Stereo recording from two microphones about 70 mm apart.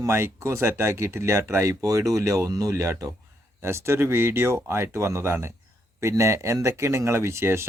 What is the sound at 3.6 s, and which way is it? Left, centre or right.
Speech, right.